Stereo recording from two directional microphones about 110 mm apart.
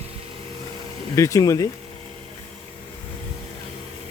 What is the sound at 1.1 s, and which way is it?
Speech, 30° left (ahead or behind).